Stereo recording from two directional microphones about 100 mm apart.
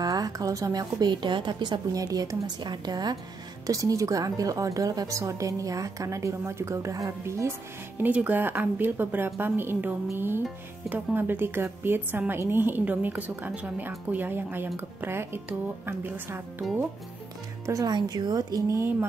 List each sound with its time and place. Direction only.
0.0 s a woman's voice: 40° right (ahead or behind)
8.0 s a woman's voice: 15° right (ahead or behind)
17.6 s speech: 35° right (ahead or behind)
17.9 s speech: 45° right (ahead or behind)
18.8 s a woman's voice: 25° right (ahead or behind)